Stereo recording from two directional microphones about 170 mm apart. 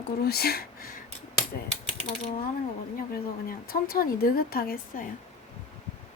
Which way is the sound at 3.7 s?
60° left (ahead or behind).